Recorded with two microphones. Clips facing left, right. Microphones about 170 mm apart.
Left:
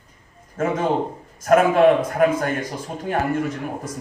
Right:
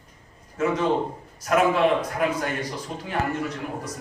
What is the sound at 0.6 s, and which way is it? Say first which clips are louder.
A man's voice: left 2 dB; 50° left (ahead or behind).